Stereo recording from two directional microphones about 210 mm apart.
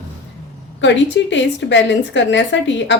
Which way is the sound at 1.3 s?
60° left (ahead or behind).